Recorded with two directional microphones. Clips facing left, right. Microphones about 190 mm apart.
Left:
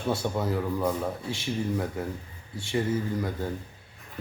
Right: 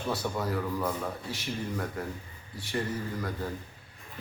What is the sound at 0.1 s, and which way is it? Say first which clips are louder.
Speech: left 4 dB; 25° left (ahead or behind).